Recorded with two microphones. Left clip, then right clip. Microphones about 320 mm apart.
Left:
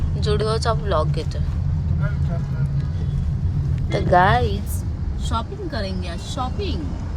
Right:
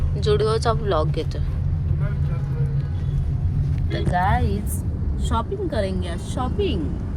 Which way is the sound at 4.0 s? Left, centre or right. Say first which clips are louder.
Left 6 dB; left.